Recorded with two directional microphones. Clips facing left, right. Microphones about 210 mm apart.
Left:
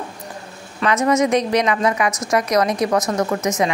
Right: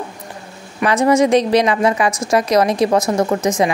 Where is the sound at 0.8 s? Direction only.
30° right (ahead or behind).